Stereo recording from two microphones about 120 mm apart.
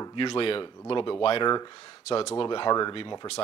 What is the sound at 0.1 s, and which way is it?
Speech, 45° left (ahead or behind).